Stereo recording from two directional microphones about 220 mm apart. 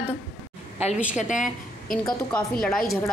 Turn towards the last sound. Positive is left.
turn(degrees=5)  # may be behind; listen again after turning